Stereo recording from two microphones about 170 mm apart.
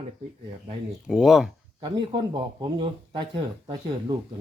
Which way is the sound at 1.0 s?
5° right (ahead or behind).